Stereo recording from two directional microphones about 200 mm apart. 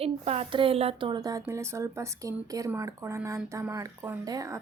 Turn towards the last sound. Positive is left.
turn(degrees=-15)  # may be behind; listen again after turning